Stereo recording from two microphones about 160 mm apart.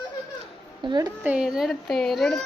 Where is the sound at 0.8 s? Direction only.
25° right (ahead or behind).